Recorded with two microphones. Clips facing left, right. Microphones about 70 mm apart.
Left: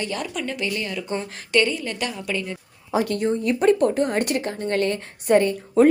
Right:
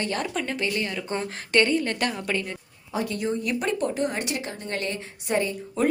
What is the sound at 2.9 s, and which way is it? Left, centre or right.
Speech, left.